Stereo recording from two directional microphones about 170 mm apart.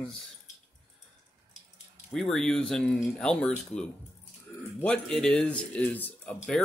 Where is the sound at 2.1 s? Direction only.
Centre (ahead or behind).